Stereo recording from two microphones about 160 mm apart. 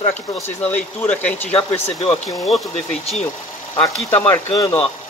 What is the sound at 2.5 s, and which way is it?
Speech, centre (ahead or behind).